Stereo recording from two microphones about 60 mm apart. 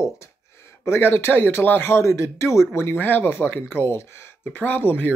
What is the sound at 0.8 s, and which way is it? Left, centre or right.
Speech, left.